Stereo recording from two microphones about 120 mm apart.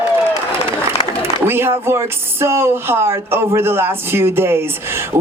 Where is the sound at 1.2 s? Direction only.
20° right (ahead or behind).